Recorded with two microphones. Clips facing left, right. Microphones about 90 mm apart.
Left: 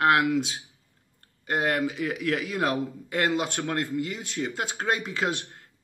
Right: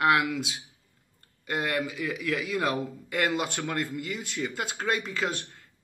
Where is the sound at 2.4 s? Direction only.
Centre (ahead or behind).